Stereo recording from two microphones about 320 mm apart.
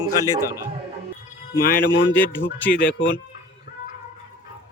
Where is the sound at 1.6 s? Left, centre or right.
Left.